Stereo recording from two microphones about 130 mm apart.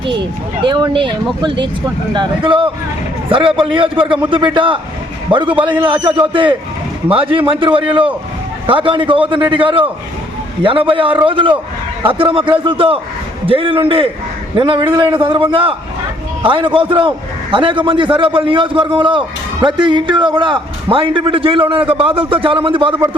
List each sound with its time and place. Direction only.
0.0 s a man's voice: 40° right (ahead or behind)